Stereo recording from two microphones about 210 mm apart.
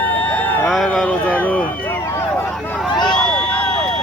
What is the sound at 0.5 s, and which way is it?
Music, centre (ahead or behind).